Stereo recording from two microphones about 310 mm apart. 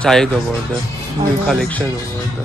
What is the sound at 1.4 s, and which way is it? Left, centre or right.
Speech, centre.